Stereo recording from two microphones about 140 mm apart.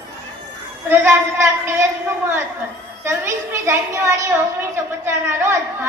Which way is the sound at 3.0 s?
15° right (ahead or behind).